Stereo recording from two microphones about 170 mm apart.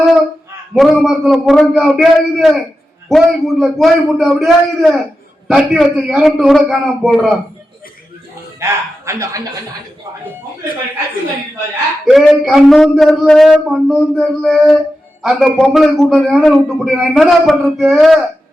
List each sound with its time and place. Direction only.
0.7 s a man's voice: 5° right (ahead or behind)
8.5 s speech: 15° right (ahead or behind)
12.0 s a man's voice: centre (ahead or behind)